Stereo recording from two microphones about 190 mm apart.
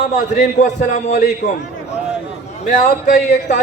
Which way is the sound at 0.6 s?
40° left (ahead or behind).